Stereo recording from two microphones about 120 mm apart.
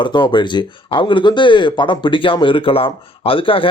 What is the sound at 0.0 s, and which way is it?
Speech, 40° left (ahead or behind).